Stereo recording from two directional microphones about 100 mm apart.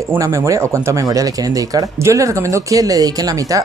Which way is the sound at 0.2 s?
30° right (ahead or behind).